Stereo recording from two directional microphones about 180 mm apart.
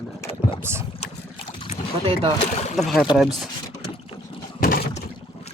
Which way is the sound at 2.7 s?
Centre (ahead or behind).